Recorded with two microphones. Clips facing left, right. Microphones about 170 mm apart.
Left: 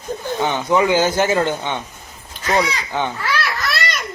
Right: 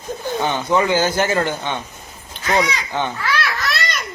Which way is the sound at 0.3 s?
15° left (ahead or behind).